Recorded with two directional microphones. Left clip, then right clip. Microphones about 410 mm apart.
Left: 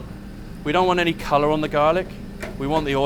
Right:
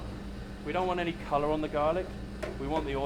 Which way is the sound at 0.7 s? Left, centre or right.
Left.